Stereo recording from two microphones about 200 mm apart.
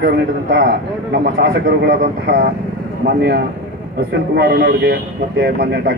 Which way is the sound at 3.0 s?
65° right (ahead or behind).